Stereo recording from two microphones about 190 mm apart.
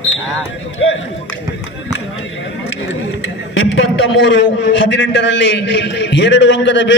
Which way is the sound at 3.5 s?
75° left (ahead or behind).